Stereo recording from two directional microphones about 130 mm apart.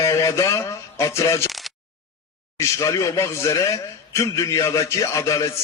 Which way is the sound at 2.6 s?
20° left (ahead or behind).